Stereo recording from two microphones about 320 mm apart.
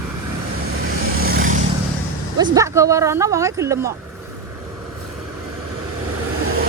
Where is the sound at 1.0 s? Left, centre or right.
Right.